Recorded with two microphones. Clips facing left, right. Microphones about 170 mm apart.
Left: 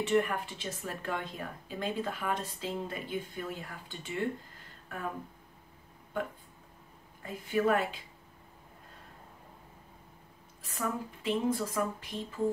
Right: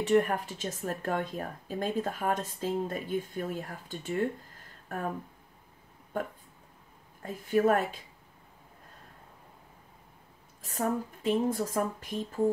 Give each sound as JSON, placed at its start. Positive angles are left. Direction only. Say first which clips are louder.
{"t": 0.0, "sound": "speech", "louder": "right 3 dB", "side_deg": -40}
{"t": 7.2, "sound": "speech", "louder": "right 3 dB", "side_deg": -45}
{"t": 10.6, "sound": "speech", "louder": "right 5 dB", "side_deg": -45}